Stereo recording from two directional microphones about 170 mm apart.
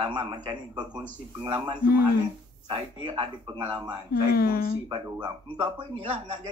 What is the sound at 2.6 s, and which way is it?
Speech, 30° right (ahead or behind).